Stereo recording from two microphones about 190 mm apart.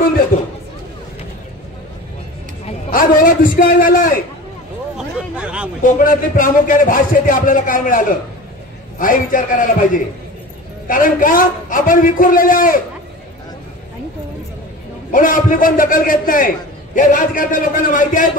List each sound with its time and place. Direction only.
2.9 s a man's voice: 45° left (ahead or behind)
4.9 s a sound: 5° right (ahead or behind)
5.8 s a man's voice: 45° left (ahead or behind)
15.0 s a man's voice: 45° left (ahead or behind)